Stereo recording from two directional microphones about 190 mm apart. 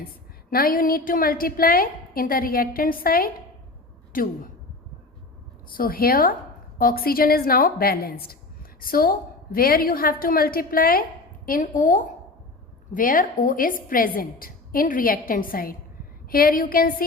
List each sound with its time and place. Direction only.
0.5 s a woman's voice: 50° left (ahead or behind)
5.6 s a woman's voice: 50° left (ahead or behind)